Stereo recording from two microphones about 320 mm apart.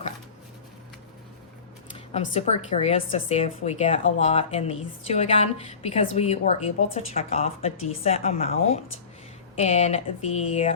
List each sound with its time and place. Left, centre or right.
2.3 s speech: centre